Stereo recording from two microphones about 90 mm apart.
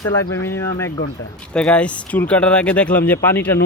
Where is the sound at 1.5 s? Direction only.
15° left (ahead or behind).